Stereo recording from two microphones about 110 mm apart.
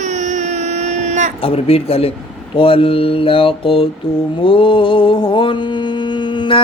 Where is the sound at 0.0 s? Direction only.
90° right.